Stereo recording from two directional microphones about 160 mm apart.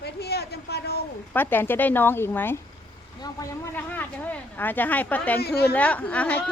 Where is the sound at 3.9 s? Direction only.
10° left (ahead or behind).